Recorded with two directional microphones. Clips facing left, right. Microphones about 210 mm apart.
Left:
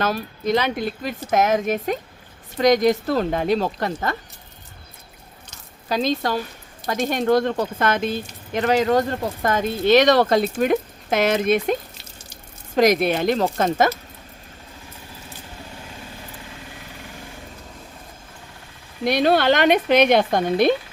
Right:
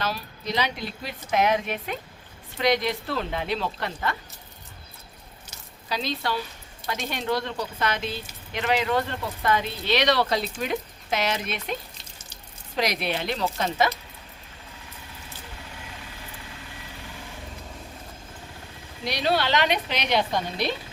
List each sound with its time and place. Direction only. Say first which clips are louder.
0.0 s speech: left 8 dB; 50° left (ahead or behind)
5.9 s speech: left 7 dB; 45° left (ahead or behind)
19.0 s speech: left 8 dB; 50° left (ahead or behind)